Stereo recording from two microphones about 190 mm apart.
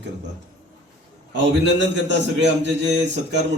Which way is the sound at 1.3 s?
70° right (ahead or behind).